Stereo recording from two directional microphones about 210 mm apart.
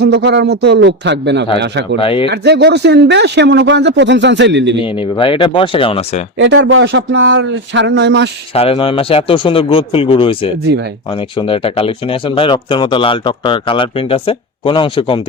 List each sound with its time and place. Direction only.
0.0 s a man's voice: 55° right (ahead or behind)
2.0 s speech: 25° left (ahead or behind)
2.3 s a man's voice: 50° right (ahead or behind)
4.8 s speech: 25° left (ahead or behind)
6.3 s a man's voice: 60° right (ahead or behind)
8.5 s speech: 30° left (ahead or behind)
10.7 s speech: 50° right (ahead or behind)
11.1 s speech: 25° left (ahead or behind)